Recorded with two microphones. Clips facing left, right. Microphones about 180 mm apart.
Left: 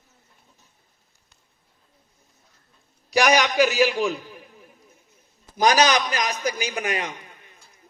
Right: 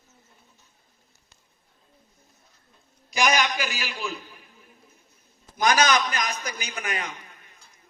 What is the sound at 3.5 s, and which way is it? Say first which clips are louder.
Speech: left 13 dB; 45° left (ahead or behind).